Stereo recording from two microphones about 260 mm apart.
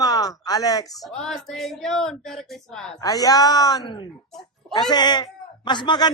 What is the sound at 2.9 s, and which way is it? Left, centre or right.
A man's voice, centre.